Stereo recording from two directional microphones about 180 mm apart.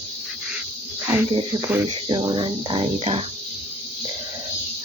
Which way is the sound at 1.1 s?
25° right (ahead or behind).